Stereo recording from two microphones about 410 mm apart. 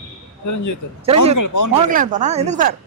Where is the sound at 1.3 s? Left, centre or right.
Left.